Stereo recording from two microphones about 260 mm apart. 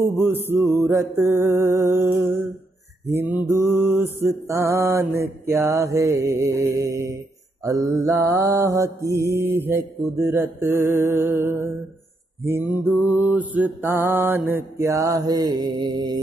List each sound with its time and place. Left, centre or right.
0.0 s mantra: centre